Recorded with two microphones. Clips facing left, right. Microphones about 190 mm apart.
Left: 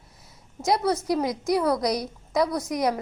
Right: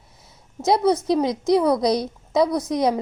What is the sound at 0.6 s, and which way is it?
A woman's voice, 20° right (ahead or behind).